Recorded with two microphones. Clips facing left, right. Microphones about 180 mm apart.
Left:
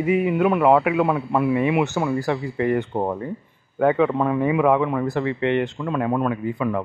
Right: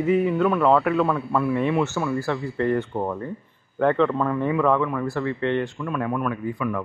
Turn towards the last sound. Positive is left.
turn(degrees=25)  # may be behind; listen again after turning